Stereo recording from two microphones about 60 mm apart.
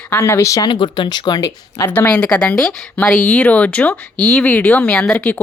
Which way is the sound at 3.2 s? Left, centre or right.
Left.